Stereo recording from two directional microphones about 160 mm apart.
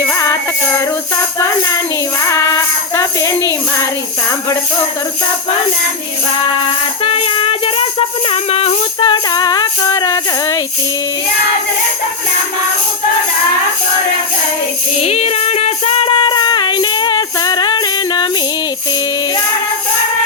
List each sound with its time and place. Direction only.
0.0 s jingle bell: 15° left (ahead or behind)
2.2 s music: 20° left (ahead or behind)
7.0 s music: 35° left (ahead or behind)
15.0 s music: 40° left (ahead or behind); by 18.3 s 25° left (ahead or behind)